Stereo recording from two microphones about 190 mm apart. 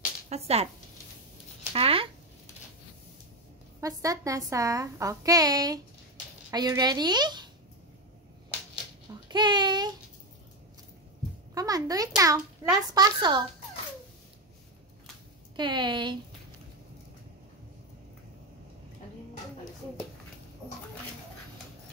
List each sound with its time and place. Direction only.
0.3 s speech: 35° right (ahead or behind)
1.7 s a sound: 30° right (ahead or behind)
3.8 s a woman's voice: 20° right (ahead or behind)
9.3 s child singing: 25° right (ahead or behind)
11.5 s a sound: 20° right (ahead or behind)
12.6 s a child's voice: 15° right (ahead or behind)
15.5 s a woman's voice: 25° right (ahead or behind)